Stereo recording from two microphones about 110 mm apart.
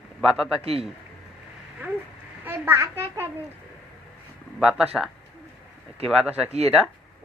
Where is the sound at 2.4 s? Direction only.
20° right (ahead or behind).